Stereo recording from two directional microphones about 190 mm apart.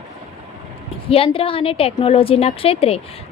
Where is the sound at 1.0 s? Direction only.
30° left (ahead or behind).